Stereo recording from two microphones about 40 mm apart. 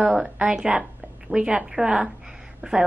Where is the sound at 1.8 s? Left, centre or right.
Right.